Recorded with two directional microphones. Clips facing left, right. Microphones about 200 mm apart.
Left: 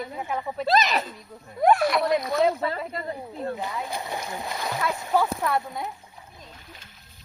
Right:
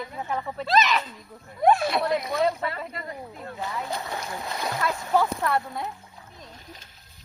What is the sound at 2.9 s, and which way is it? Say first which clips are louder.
Speech: left 4 dB; 30° left (ahead or behind).